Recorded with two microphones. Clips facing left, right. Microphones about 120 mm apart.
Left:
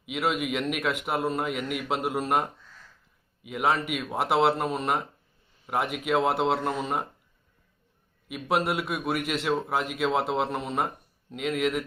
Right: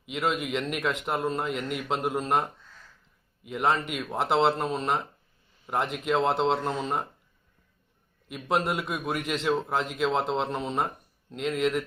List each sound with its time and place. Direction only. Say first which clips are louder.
0.1 s a man's voice: left 1 dB; 5° left (ahead or behind)
3.5 s a man's voice: even; 5° left (ahead or behind)
8.3 s a man's voice: left 1 dB; 5° left (ahead or behind)